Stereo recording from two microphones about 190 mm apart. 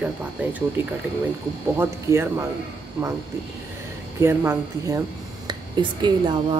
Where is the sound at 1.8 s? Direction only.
15° right (ahead or behind).